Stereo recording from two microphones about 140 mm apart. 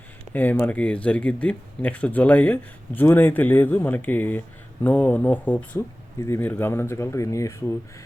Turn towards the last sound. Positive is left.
turn(degrees=20)  # may be behind; listen again after turning